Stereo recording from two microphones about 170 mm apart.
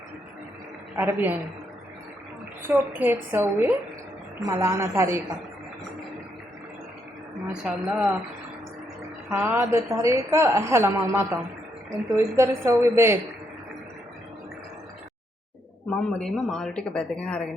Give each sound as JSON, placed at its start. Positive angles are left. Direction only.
{"t": 0.9, "sound": "a woman's voice", "side_deg": -10}
{"t": 2.6, "sound": "a woman's voice", "side_deg": -10}
{"t": 7.4, "sound": "speech", "side_deg": -5}
{"t": 9.3, "sound": "a woman's voice", "side_deg": -15}
{"t": 16.1, "sound": "speech", "side_deg": 5}